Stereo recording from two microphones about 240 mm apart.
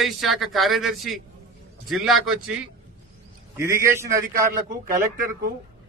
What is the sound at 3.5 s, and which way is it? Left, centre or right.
Speech, centre.